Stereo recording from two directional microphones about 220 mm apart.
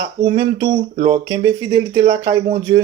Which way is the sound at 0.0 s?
15° right (ahead or behind).